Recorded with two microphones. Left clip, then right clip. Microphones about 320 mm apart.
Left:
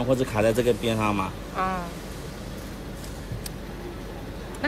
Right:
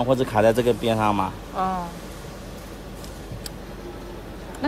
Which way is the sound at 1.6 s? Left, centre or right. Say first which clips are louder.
Right 2 dB; centre.